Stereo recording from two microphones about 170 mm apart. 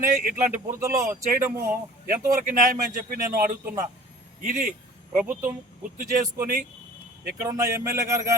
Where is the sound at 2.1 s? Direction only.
55° right (ahead or behind).